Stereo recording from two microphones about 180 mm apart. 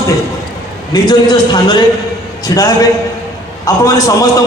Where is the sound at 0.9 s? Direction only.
25° left (ahead or behind).